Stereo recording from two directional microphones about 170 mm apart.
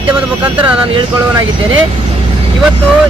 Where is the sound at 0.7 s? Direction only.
30° right (ahead or behind).